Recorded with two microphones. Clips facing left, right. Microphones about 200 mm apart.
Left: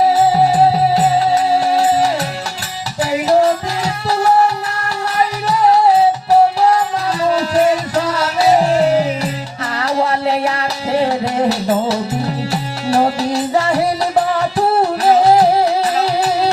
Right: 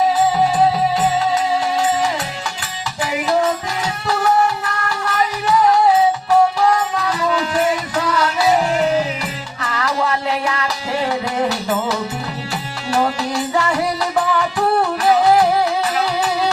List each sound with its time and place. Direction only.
0.1 s music: 35° left (ahead or behind)